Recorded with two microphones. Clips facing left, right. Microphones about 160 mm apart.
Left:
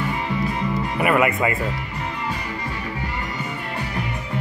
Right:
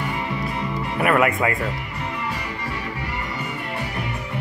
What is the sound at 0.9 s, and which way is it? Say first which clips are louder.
Speech: right 1 dB; centre (ahead or behind).